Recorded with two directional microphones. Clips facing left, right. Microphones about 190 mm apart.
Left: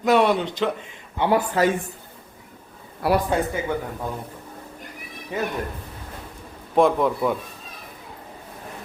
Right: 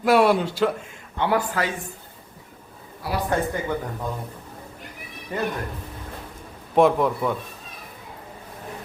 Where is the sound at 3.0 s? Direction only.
65° left (ahead or behind).